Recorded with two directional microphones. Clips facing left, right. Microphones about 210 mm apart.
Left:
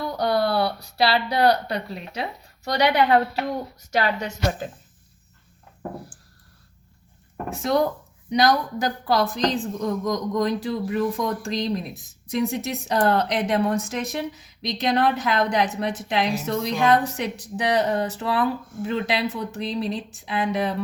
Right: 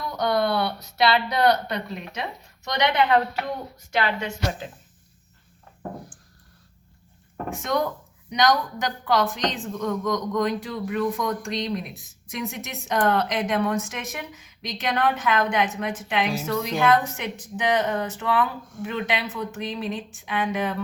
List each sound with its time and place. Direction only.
0.0 s a woman's voice: 30° left (ahead or behind)
7.5 s a woman's voice: 35° left (ahead or behind)